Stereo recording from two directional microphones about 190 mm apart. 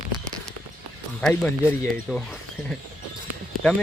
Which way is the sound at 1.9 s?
5° left (ahead or behind).